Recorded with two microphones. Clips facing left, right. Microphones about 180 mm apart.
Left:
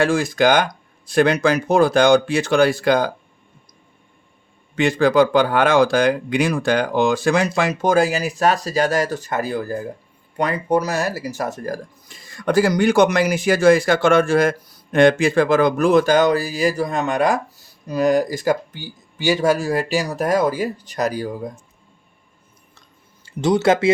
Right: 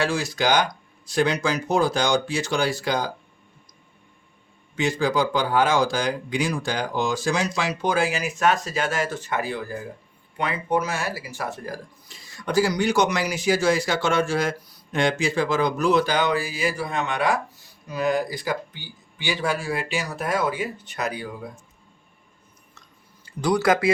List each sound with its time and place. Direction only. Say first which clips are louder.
0.0 s speech: left 7 dB; 50° left (ahead or behind)
4.7 s speech: left 7 dB; 60° left (ahead or behind); by 21.5 s 40° left (ahead or behind)
23.2 s speech: left 4 dB; 25° left (ahead or behind)